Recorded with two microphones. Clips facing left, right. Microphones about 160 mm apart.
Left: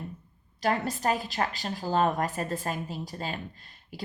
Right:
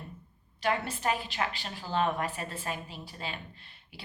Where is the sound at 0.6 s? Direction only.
40° left (ahead or behind).